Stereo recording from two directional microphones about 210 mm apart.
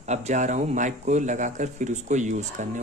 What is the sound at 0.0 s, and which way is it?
Speech, 35° right (ahead or behind).